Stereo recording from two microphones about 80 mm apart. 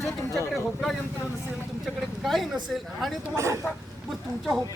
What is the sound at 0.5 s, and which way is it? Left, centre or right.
Speech, centre.